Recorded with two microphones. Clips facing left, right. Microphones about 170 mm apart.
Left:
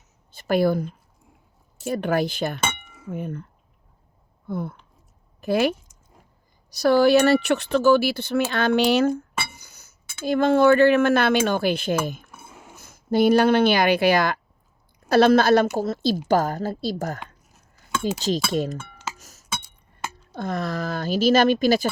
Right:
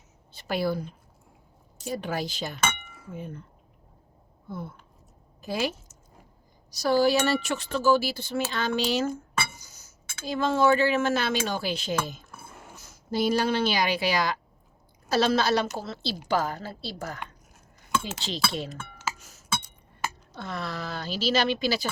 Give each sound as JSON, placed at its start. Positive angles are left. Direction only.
{"t": 0.3, "sound": "a woman's voice", "side_deg": 50}
{"t": 4.4, "sound": "speech", "side_deg": 60}
{"t": 12.3, "sound": "a sound", "side_deg": 5}
{"t": 12.7, "sound": "a woman's voice", "side_deg": 55}
{"t": 19.2, "sound": "chink", "side_deg": 40}
{"t": 20.3, "sound": "a woman's voice", "side_deg": 45}